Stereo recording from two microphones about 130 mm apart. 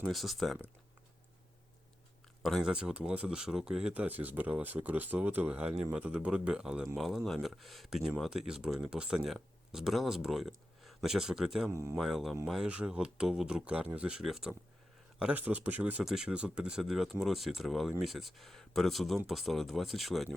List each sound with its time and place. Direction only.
0.1 s speech: centre (ahead or behind)
2.4 s speech: centre (ahead or behind)
11.7 s speech: 20° right (ahead or behind)
11.9 s speech: centre (ahead or behind)